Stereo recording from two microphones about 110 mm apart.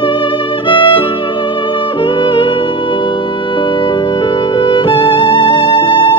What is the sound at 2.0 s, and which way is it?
Music, 45° left (ahead or behind).